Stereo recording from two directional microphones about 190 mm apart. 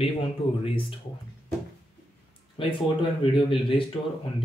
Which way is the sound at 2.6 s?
25° left (ahead or behind).